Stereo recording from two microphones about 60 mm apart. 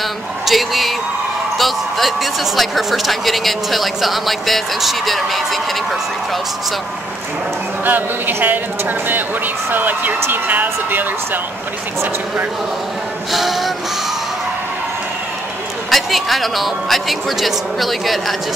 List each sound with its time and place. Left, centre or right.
0.5 s speech: centre
7.8 s speech: right
13.3 s speech: centre
15.9 s speech: centre